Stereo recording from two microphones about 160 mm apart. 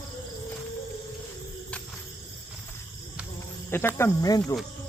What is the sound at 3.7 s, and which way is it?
Speech, 15° left (ahead or behind).